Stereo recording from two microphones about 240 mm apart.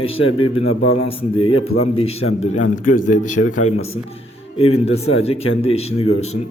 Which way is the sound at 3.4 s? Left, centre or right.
Left.